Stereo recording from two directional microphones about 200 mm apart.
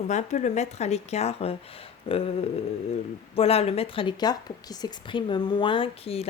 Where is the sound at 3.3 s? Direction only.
30° left (ahead or behind).